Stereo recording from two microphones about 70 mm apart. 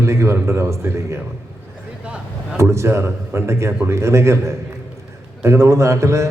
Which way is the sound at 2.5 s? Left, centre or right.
Right.